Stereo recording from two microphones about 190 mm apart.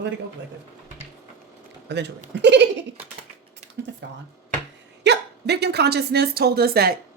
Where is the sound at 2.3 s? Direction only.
65° right (ahead or behind).